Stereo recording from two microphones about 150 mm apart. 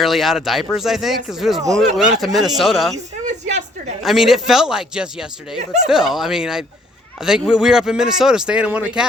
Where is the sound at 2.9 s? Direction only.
50° right (ahead or behind).